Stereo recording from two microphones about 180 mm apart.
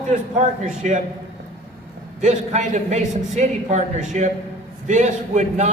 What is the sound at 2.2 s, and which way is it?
A man's voice, 40° right (ahead or behind).